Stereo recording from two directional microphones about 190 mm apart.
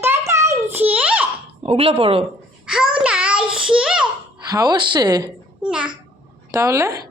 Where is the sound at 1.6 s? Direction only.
35° right (ahead or behind).